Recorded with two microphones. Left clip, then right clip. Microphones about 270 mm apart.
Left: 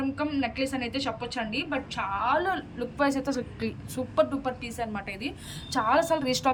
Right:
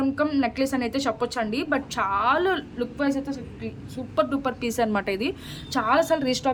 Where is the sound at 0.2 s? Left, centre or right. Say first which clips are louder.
Right 5 dB; centre.